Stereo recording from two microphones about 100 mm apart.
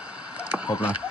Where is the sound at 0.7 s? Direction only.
15° right (ahead or behind).